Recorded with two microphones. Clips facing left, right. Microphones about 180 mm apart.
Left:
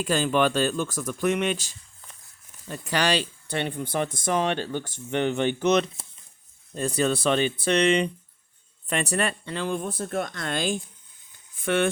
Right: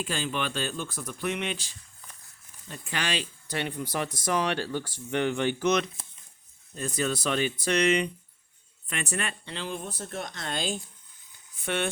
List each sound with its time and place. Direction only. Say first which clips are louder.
0.0 s speech: left 9 dB; 40° left (ahead or behind)
0.9 s speech: left 7 dB; 90° left
1.2 s speech: left 7 dB; 50° left (ahead or behind)